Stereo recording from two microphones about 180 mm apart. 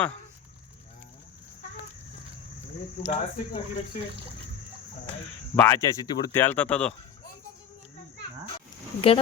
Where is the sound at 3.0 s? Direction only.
35° left (ahead or behind).